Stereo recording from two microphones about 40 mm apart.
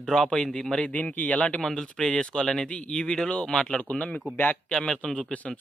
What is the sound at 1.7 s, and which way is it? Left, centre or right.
Speech, centre.